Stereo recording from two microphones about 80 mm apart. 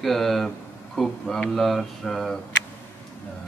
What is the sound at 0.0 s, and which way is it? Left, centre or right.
Speech, centre.